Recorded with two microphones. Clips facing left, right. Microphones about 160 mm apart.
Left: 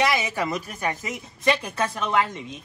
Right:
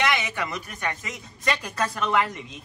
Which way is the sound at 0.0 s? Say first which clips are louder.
Left 2 dB; 35° left (ahead or behind).